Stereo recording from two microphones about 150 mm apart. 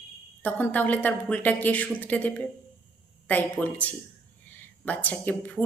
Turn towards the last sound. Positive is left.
turn(degrees=10)  # may be behind; listen again after turning